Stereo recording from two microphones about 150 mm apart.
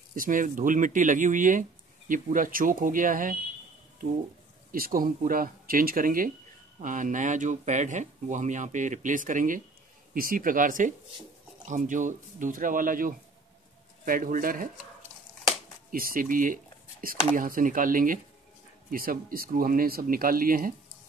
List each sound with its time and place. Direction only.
0.1 s speech: 65° right (ahead or behind)
4.7 s speech: 75° right (ahead or behind)
15.9 s speech: 70° right (ahead or behind)